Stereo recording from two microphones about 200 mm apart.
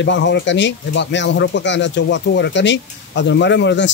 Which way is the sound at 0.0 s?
65° left (ahead or behind).